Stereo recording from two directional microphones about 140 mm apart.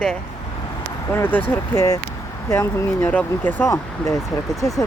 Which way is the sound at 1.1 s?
15° left (ahead or behind).